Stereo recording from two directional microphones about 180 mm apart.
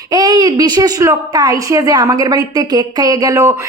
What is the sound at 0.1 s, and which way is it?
A woman's voice, 20° right (ahead or behind).